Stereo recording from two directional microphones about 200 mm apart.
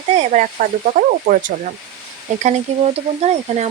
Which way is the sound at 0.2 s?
35° right (ahead or behind).